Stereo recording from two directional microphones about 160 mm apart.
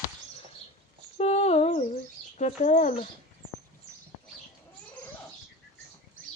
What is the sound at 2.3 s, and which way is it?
Speech, 50° left (ahead or behind).